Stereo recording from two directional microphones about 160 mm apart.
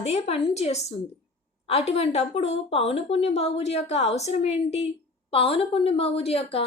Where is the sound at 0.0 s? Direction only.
40° left (ahead or behind).